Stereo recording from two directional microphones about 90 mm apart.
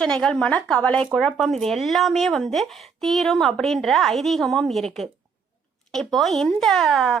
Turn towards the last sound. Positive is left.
turn(degrees=5)  # may be behind; listen again after turning